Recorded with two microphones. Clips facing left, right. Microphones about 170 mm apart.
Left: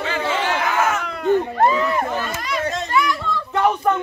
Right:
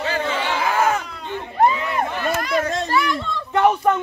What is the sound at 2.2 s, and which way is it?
Chatter, 55° right (ahead or behind).